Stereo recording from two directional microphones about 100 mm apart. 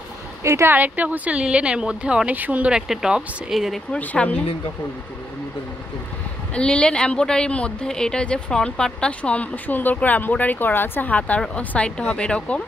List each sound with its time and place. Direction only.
0.4 s speech: 30° right (ahead or behind); by 4.0 s centre (ahead or behind)
4.0 s a woman's voice: 15° left (ahead or behind)
6.5 s a woman's voice: 10° left (ahead or behind)